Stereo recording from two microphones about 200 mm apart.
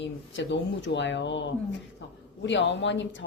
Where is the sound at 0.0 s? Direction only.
65° left (ahead or behind).